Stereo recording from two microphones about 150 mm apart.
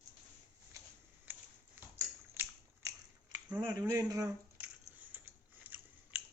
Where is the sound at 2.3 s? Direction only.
20° right (ahead or behind).